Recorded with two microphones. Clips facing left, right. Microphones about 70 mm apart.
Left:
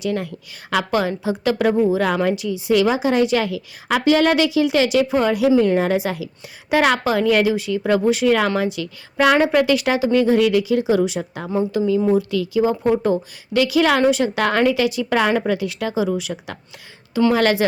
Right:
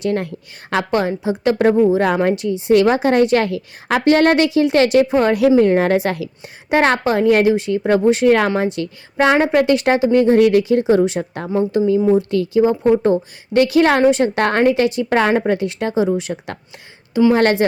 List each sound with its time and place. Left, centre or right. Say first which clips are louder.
0.0 s a woman's voice: right 3 dB; right
0.8 s a woman's voice: right 2 dB; right
2.7 s a woman's voice: right 4 dB; right
6.7 s a woman's voice: right 2 dB; right
9.2 s a woman's voice: right 1 dB; right